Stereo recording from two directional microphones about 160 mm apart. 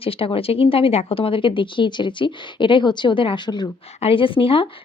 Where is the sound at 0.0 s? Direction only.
35° left (ahead or behind).